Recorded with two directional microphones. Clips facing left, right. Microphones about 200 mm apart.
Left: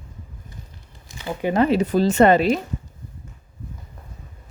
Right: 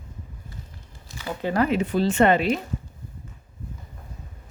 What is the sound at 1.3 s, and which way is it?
Speech, 15° left (ahead or behind).